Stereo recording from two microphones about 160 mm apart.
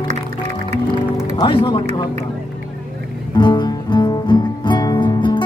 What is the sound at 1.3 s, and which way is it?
Speech, 30° left (ahead or behind).